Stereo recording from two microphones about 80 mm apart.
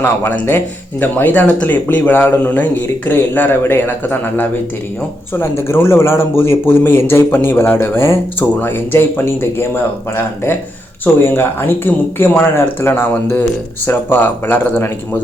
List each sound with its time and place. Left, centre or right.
0.0 s speech: left